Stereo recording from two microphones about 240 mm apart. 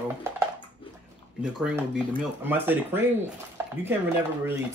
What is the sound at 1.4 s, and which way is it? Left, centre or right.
Speech, centre.